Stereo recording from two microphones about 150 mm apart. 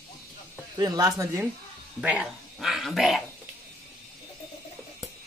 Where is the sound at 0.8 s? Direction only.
25° right (ahead or behind).